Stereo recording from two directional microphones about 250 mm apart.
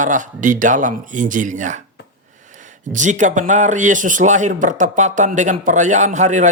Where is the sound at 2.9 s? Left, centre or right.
Right.